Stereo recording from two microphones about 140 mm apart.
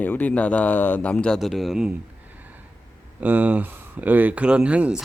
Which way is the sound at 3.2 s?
10° right (ahead or behind).